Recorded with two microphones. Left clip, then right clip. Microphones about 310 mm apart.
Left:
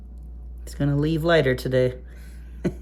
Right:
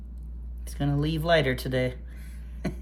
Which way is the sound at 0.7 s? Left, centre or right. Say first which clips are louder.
Left 5 dB; left.